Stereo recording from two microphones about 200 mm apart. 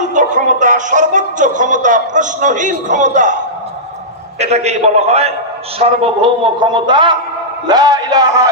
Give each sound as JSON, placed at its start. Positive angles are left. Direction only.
{"t": 0.1, "sound": "speech", "side_deg": -40}
{"t": 4.4, "sound": "a man's voice", "side_deg": -35}